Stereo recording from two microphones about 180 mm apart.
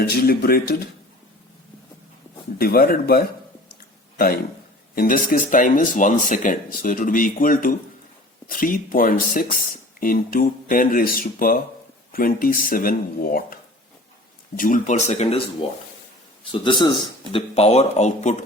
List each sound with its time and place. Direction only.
0.1 s speech: 60° left (ahead or behind)
2.6 s speech: 55° left (ahead or behind)
4.9 s speech: 50° left (ahead or behind)
14.6 s a man's voice: 45° left (ahead or behind)